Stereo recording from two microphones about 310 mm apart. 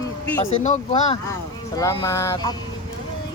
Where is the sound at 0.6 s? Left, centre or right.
Left.